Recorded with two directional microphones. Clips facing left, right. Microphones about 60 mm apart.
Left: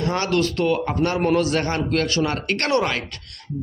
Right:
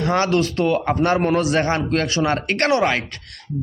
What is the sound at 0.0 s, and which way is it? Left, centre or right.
A man's voice, right.